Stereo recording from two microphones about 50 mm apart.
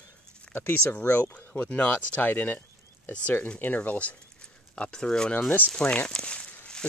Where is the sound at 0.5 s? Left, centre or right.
Left.